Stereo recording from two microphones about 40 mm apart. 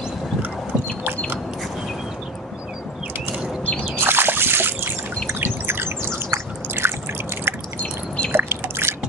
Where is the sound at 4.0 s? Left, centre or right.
Right.